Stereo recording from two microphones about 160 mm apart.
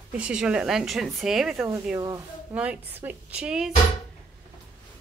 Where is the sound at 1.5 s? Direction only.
15° right (ahead or behind).